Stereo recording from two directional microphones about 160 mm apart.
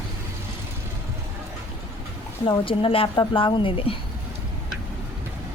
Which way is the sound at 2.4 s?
35° left (ahead or behind).